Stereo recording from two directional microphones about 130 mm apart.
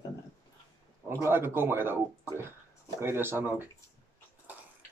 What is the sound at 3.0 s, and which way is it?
Speech, 20° right (ahead or behind).